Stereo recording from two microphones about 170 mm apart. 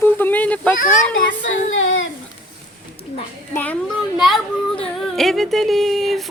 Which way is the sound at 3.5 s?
10° left (ahead or behind).